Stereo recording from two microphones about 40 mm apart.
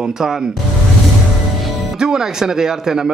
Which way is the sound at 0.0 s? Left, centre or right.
Centre.